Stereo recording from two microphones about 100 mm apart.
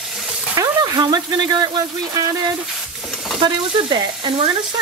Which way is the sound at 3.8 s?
55° right (ahead or behind).